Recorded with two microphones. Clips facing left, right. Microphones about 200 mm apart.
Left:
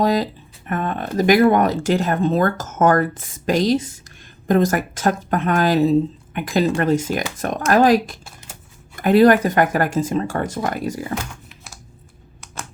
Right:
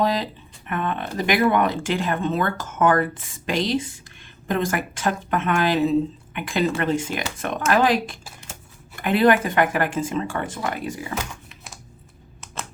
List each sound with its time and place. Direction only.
0.0 s speech: 40° left (ahead or behind)